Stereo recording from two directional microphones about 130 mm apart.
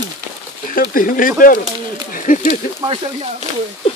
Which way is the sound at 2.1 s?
80° left.